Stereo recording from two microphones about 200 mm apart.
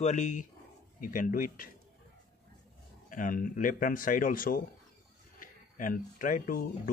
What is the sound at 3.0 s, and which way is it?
Speech, 40° left (ahead or behind).